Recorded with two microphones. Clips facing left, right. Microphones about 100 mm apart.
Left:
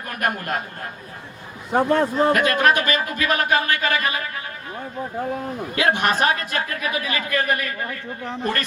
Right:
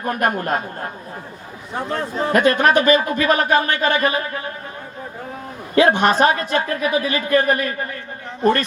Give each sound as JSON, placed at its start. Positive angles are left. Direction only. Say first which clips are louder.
{"t": 0.0, "sound": "a man's voice", "louder": "right 5 dB", "side_deg": -30}
{"t": 1.7, "sound": "a man's voice", "louder": "left 6 dB", "side_deg": 55}
{"t": 2.3, "sound": "speech", "louder": "right 3 dB", "side_deg": -30}
{"t": 5.7, "sound": "speech", "louder": "right 6 dB", "side_deg": -30}